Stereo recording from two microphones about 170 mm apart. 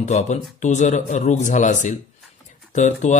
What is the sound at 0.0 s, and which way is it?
Speech, 40° left (ahead or behind).